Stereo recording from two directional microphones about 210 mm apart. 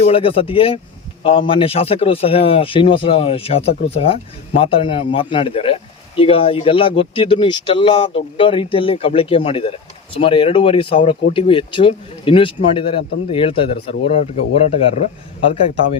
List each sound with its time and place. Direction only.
0.0 s speech: 25° left (ahead or behind)